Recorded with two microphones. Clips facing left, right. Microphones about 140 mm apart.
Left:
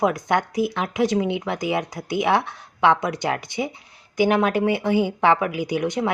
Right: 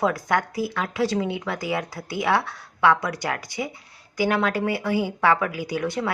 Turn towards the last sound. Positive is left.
turn(degrees=20)  # may be behind; listen again after turning